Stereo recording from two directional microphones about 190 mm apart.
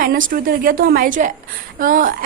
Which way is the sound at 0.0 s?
50° right (ahead or behind).